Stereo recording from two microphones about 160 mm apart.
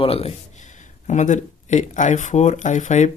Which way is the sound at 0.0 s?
40° left (ahead or behind).